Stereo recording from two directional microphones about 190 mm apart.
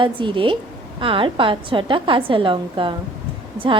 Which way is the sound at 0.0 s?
25° right (ahead or behind).